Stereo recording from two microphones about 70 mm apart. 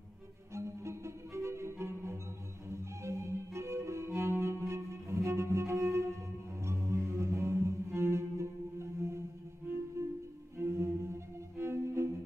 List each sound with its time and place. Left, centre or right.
0.6 s music: right
10.6 s cello: right